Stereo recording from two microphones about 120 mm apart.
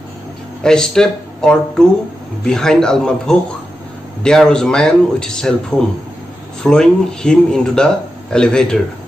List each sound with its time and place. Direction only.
0.7 s speech: 5° left (ahead or behind)
6.6 s speech: 5° left (ahead or behind)